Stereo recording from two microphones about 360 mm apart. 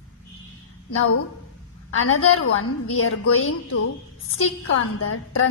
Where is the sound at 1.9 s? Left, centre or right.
Left.